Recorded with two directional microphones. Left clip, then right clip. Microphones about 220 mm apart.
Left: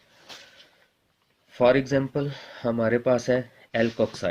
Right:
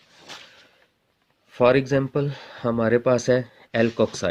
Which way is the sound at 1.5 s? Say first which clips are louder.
Right 2 dB; 50° right (ahead or behind).